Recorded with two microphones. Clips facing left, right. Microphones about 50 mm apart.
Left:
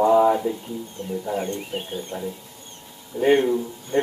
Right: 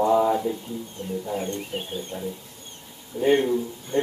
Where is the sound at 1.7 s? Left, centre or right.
Centre.